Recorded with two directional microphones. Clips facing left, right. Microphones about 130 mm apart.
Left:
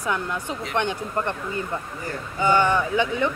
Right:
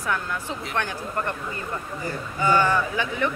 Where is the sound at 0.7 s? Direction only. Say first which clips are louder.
Left 4 dB; 20° left (ahead or behind).